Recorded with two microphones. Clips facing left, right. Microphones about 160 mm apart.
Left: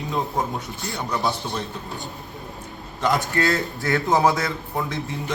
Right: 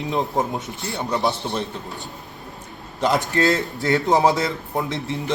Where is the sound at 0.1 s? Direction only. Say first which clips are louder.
Right 2 dB; 20° right (ahead or behind).